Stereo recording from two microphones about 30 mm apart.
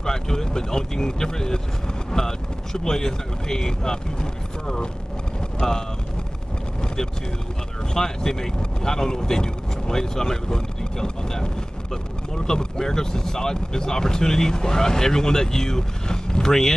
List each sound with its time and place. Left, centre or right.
0.0 s speech: centre
7.9 s speech: centre
12.4 s speech: left